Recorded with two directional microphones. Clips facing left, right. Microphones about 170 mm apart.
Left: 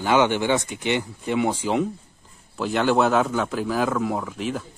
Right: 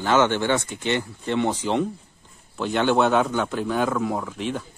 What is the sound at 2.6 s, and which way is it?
A man's voice, centre (ahead or behind).